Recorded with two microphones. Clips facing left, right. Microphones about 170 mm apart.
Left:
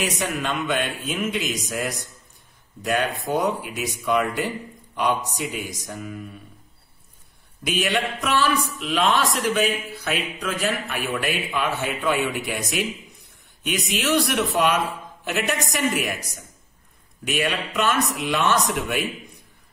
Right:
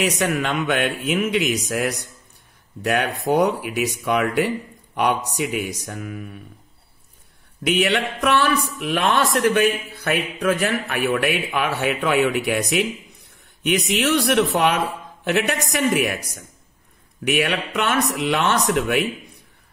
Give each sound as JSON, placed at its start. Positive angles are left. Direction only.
{"t": 0.0, "sound": "speech", "side_deg": -65}
{"t": 7.6, "sound": "speech", "side_deg": -65}
{"t": 17.2, "sound": "speech", "side_deg": -65}